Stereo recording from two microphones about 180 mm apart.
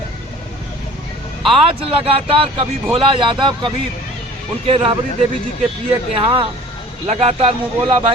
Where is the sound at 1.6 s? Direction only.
30° right (ahead or behind).